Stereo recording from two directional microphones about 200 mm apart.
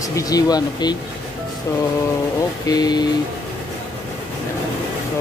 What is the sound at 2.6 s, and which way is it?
Speech, 20° left (ahead or behind).